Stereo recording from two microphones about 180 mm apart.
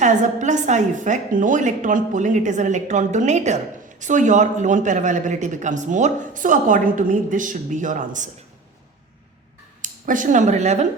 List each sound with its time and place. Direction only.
0.0 s speech: 40° right (ahead or behind)
9.8 s speech: 45° right (ahead or behind)